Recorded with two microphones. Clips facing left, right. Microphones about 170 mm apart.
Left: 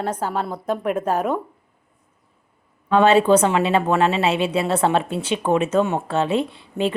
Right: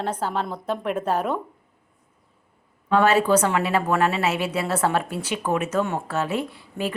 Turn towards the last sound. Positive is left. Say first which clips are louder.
# left 5 dB
turn(degrees=25)  # may be behind; listen again after turning